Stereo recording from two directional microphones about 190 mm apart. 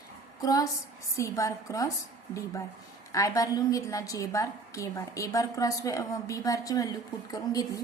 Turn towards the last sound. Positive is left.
turn(degrees=20)  # may be behind; listen again after turning